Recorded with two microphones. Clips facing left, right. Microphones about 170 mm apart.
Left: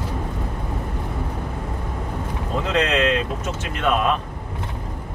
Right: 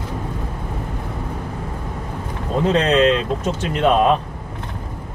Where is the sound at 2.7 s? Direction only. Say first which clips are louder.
Right 4 dB; 30° right (ahead or behind).